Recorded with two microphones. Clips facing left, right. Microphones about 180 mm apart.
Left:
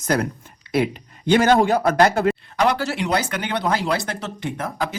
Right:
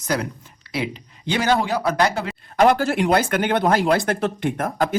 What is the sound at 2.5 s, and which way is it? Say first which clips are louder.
Speech: right 4 dB; 50° right (ahead or behind).